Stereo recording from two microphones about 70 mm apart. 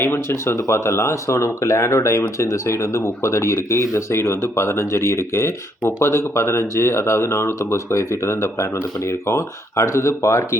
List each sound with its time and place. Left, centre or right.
0.0 s speech: left